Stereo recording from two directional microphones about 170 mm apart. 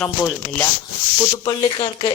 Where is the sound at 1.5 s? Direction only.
30° left (ahead or behind).